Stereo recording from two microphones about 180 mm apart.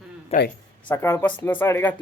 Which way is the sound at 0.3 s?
40° left (ahead or behind).